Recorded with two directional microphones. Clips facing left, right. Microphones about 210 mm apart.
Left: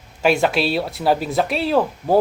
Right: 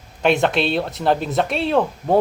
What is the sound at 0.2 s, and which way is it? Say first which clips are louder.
Speech: even; 5° left (ahead or behind).